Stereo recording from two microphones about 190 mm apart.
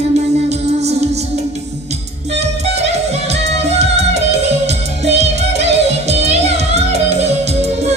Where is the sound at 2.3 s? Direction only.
35° right (ahead or behind).